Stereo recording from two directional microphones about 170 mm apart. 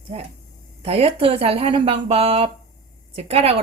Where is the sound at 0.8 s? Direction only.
35° right (ahead or behind).